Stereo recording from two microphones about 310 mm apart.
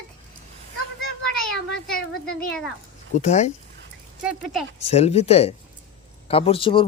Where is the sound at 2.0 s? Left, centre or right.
Left.